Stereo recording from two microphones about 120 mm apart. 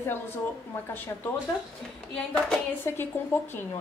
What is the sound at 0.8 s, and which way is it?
Speech, 15° left (ahead or behind).